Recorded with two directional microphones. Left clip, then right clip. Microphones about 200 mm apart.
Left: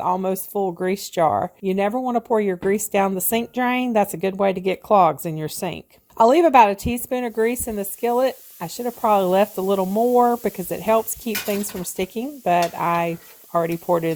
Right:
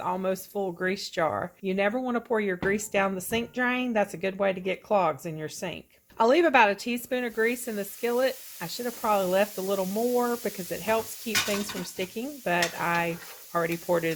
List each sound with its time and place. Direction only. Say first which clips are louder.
0.0 s speech: left 7 dB; 35° left (ahead or behind)